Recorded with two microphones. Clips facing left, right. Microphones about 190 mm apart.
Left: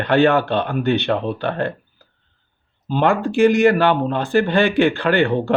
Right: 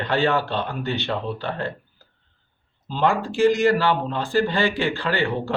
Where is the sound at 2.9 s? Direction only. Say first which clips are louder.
Left 4 dB; 60° left (ahead or behind).